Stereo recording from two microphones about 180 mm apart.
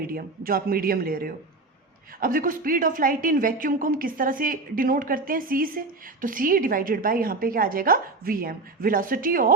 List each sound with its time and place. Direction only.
0.0 s speech: 55° right (ahead or behind)